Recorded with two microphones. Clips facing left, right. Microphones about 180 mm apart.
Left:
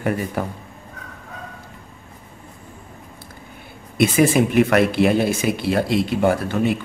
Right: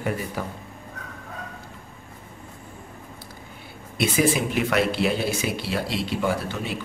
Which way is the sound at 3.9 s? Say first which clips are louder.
Left 6 dB; 55° left (ahead or behind).